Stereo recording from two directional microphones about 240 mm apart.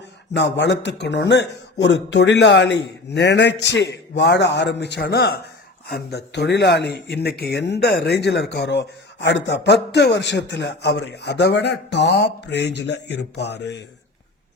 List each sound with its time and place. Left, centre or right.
0.3 s speech: left